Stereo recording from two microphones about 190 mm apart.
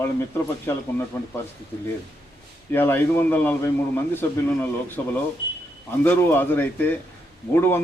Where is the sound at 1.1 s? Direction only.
15° left (ahead or behind).